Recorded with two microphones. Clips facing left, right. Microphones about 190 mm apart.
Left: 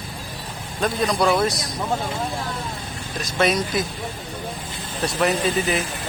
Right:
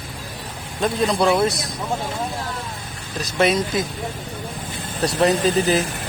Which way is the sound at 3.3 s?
25° right (ahead or behind).